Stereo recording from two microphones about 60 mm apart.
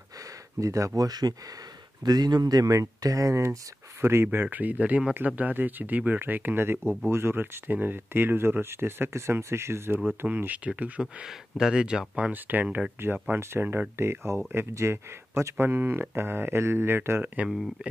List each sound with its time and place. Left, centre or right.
0.2 s speech: right
4.0 s speech: right
10.2 s speech: right
11.0 s speech: centre
12.3 s speech: right